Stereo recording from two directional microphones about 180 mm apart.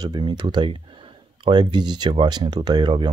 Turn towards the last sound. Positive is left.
turn(degrees=-25)  # may be behind; listen again after turning